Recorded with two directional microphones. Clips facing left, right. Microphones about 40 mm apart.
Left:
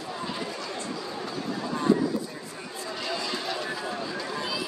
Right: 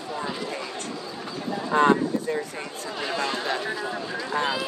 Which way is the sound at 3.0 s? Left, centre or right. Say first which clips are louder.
Right 5 dB; right.